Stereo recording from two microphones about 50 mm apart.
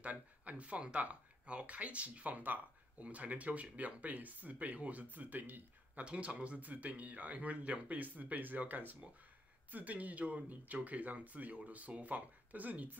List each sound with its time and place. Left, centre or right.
0.0 s speech: right
6.0 s speech: right